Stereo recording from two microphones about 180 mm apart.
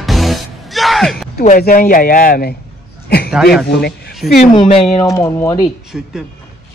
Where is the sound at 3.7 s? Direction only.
65° left (ahead or behind).